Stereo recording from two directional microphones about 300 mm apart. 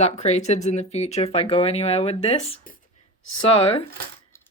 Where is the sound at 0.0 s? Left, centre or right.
Left.